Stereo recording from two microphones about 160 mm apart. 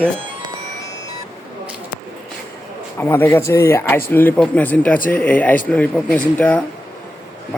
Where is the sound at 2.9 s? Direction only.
15° left (ahead or behind).